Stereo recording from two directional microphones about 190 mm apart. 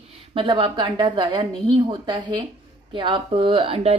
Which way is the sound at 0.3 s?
25° right (ahead or behind).